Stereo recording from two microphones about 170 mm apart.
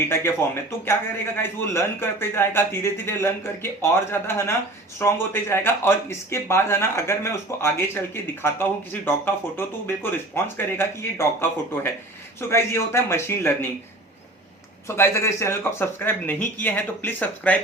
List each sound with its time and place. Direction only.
0.1 s speech: 15° left (ahead or behind)
14.8 s speech: 15° left (ahead or behind)